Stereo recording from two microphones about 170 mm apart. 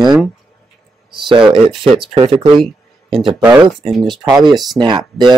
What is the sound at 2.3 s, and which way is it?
Speech, centre (ahead or behind).